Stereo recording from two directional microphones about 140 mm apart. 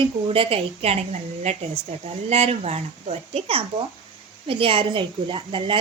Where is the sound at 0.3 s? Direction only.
45° right (ahead or behind).